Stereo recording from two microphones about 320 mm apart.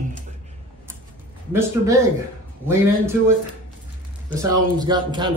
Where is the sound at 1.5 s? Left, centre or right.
Centre.